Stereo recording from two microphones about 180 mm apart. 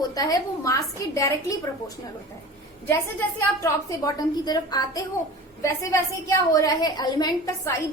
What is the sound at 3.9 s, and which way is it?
A woman's voice, 20° left (ahead or behind).